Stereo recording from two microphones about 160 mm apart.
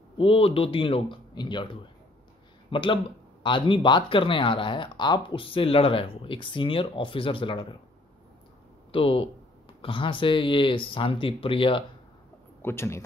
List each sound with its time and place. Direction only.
0.2 s speech: 35° left (ahead or behind)
8.9 s speech: 35° left (ahead or behind)
12.6 s a man's voice: 15° left (ahead or behind)